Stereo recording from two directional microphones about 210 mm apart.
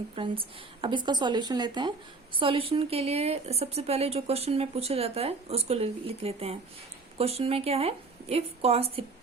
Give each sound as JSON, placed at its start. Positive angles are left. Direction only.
{"t": 0.2, "sound": "speech", "side_deg": -25}